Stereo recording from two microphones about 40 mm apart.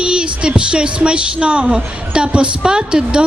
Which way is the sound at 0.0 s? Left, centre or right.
Right.